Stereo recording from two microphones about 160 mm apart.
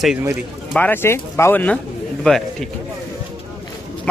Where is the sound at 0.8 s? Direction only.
10° left (ahead or behind).